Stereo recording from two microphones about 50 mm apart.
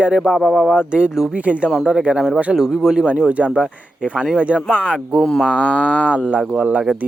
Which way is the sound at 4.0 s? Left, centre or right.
Centre.